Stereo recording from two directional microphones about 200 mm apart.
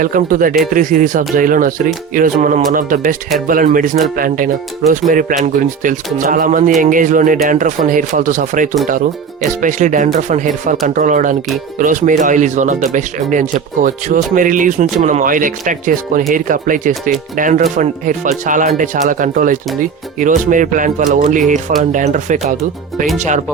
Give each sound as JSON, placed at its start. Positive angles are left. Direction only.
{"t": 0.0, "sound": "speech", "side_deg": -45}